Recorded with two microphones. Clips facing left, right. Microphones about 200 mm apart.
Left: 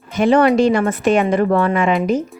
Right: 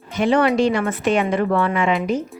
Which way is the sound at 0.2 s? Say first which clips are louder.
Left 4 dB; 45° left (ahead or behind).